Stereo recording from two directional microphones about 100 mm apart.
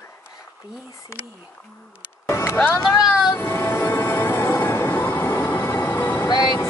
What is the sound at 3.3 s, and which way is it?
Train, 20° left (ahead or behind).